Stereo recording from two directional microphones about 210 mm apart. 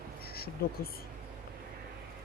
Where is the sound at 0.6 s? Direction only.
45° left (ahead or behind).